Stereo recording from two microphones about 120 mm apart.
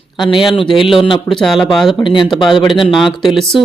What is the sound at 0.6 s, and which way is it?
Speech, 45° left (ahead or behind).